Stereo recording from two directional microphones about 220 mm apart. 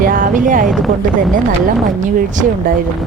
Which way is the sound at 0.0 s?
40° right (ahead or behind).